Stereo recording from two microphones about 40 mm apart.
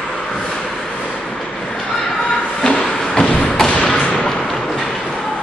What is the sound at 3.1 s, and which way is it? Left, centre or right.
Thump, centre.